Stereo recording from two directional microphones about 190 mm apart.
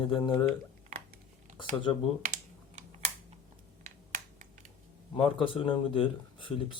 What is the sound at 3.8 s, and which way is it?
Finger snapping, 40° right (ahead or behind).